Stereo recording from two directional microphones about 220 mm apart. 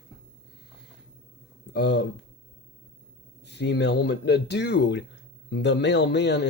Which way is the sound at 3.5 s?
50° left (ahead or behind).